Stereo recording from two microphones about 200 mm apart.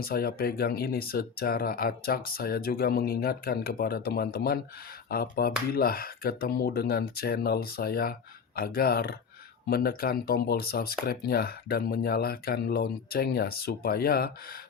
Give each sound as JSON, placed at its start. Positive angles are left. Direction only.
{"t": 0.0, "sound": "speech", "side_deg": 50}